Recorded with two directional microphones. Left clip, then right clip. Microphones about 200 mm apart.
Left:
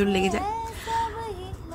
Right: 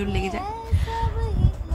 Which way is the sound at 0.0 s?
20° left (ahead or behind).